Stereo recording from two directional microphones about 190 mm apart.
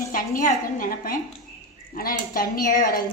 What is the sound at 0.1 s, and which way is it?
A woman's voice, 45° left (ahead or behind).